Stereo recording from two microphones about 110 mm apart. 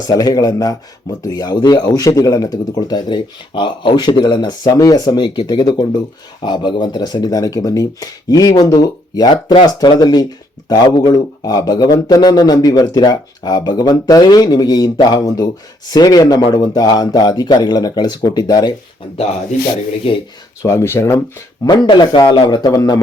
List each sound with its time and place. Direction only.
0.0 s speech: 35° left (ahead or behind)
19.1 s speech: 65° left (ahead or behind)
20.6 s speech: 25° left (ahead or behind)
21.8 s a man's voice: 45° left (ahead or behind)